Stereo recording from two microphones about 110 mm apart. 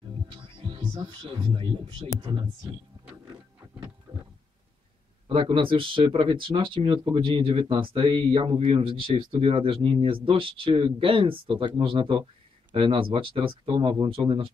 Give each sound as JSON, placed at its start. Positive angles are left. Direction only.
{"t": 0.6, "sound": "speech", "side_deg": -50}
{"t": 4.1, "sound": "a sound", "side_deg": -25}
{"t": 5.3, "sound": "speech", "side_deg": -55}